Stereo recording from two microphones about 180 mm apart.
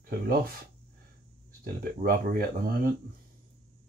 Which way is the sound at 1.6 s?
55° right (ahead or behind).